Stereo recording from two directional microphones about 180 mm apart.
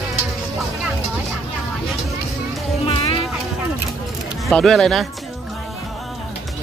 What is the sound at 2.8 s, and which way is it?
Music, 30° left (ahead or behind).